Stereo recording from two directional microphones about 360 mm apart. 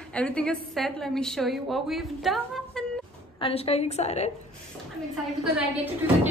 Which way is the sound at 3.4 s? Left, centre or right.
Centre.